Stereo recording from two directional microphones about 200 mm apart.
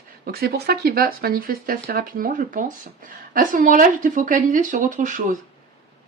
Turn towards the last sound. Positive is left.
turn(degrees=-40)  # may be behind; listen again after turning